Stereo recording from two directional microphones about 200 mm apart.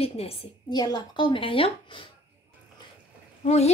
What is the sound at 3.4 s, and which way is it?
Speech, 35° left (ahead or behind).